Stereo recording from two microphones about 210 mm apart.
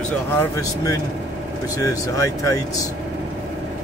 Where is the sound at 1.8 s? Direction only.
15° left (ahead or behind).